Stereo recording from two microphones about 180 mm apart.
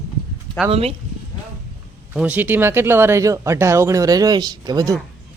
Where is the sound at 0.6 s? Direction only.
35° right (ahead or behind).